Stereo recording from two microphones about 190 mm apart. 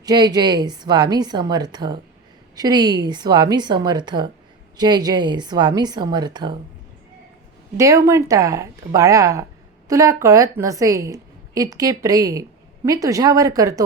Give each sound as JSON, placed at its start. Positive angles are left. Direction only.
{"t": 0.0, "sound": "a woman's voice", "side_deg": -20}
{"t": 7.8, "sound": "a woman's voice", "side_deg": -15}